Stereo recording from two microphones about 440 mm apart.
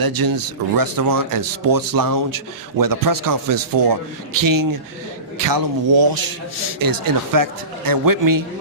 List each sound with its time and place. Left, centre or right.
0.0 s speech: right